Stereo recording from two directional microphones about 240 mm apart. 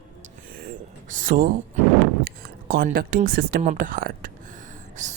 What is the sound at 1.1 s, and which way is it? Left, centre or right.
Speech, right.